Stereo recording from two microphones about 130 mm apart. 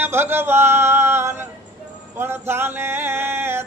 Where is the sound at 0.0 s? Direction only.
15° right (ahead or behind).